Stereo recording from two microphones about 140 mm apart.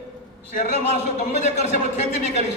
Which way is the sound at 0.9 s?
55° left (ahead or behind).